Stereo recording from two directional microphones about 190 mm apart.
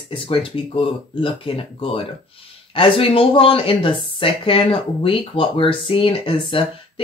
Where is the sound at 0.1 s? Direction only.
25° left (ahead or behind).